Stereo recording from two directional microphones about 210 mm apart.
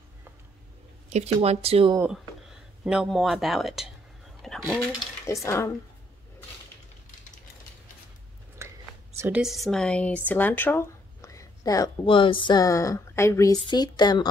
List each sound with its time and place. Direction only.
1.1 s speech: 30° right (ahead or behind)
2.0 s speech: 5° right (ahead or behind)
4.4 s a sound: centre (ahead or behind)
5.2 s speech: 15° left (ahead or behind)
8.6 s a sound: 15° right (ahead or behind)
9.2 s speech: 5° right (ahead or behind); by 14.2 s 20° left (ahead or behind)